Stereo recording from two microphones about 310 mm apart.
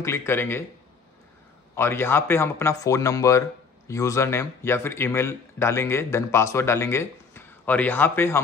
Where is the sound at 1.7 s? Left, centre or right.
Centre.